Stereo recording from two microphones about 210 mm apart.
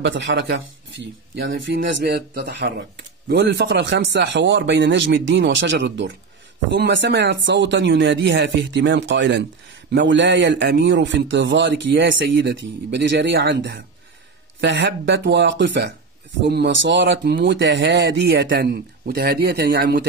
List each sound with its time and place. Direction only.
0.0 s a man's voice: 65° right (ahead or behind)
1.0 s a man's voice: 55° right (ahead or behind)